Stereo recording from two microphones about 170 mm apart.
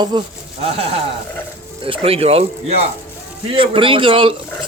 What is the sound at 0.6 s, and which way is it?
Speech, 35° right (ahead or behind).